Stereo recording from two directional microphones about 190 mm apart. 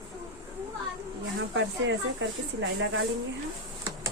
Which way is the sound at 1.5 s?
75° right (ahead or behind).